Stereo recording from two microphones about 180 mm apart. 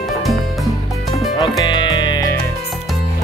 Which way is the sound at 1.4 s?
25° left (ahead or behind).